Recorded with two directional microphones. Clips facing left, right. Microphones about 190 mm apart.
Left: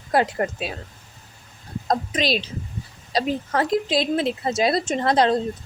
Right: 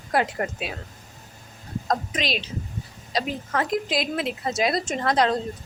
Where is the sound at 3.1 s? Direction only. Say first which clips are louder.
Left 4 dB; 35° left (ahead or behind).